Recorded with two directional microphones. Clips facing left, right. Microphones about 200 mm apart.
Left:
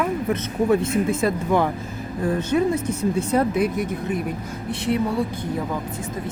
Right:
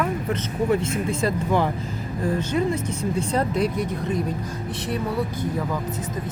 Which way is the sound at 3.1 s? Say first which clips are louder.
Left 2 dB; 5° left (ahead or behind).